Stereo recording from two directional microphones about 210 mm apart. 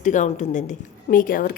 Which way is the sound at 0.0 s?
35° left (ahead or behind).